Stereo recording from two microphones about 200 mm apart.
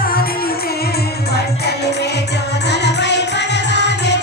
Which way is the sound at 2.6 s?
60° left (ahead or behind).